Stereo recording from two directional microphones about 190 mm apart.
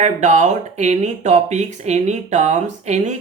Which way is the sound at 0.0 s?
40° right (ahead or behind).